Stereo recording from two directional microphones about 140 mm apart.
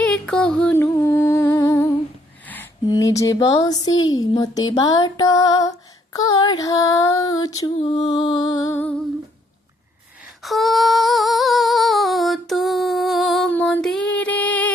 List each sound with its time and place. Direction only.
0.0 s music: 5° left (ahead or behind); by 1.9 s 20° left (ahead or behind)
2.8 s speech: 25° left (ahead or behind)
7.8 s music: 35° left (ahead or behind)
10.4 s female singing: centre (ahead or behind)
13.5 s a sound: 10° left (ahead or behind)